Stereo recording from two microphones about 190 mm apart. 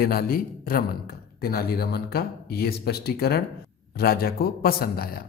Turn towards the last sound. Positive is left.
turn(degrees=50)  # may be behind; listen again after turning